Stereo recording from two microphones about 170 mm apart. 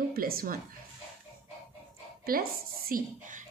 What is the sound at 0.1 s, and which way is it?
Speech, 60° right (ahead or behind).